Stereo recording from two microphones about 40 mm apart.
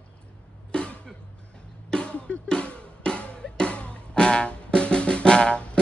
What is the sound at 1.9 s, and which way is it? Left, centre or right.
Drum, left.